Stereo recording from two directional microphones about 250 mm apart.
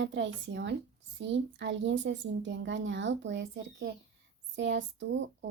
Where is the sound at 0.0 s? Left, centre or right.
Right.